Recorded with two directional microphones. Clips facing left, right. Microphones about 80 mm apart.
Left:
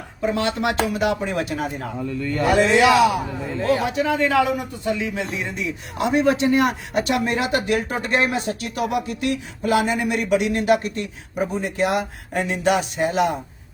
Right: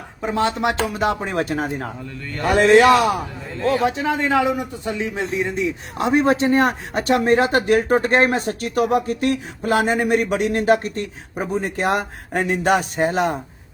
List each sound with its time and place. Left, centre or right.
0.2 s a man's voice: right
3.8 s a man's voice: right